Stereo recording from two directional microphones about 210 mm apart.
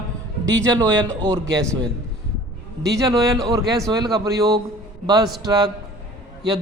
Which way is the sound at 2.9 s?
15° right (ahead or behind).